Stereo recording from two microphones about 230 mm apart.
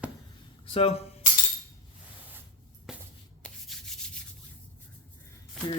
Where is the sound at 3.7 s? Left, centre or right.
Centre.